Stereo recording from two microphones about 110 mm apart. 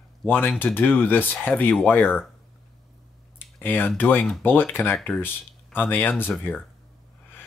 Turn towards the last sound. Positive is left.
turn(degrees=20)  # may be behind; listen again after turning